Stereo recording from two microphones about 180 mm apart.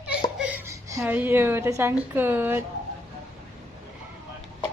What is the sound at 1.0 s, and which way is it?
A woman's voice, 10° right (ahead or behind).